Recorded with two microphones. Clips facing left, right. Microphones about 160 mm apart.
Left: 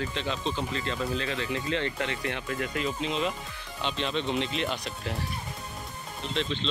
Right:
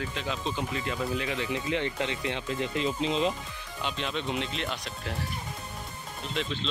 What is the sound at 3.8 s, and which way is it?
Speech, 5° right (ahead or behind).